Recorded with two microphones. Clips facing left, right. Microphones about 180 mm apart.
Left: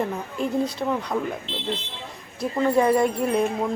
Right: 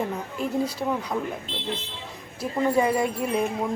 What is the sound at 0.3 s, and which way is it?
Speech, 5° right (ahead or behind).